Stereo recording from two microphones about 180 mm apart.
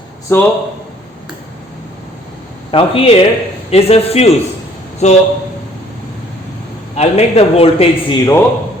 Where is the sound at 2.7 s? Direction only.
30° left (ahead or behind).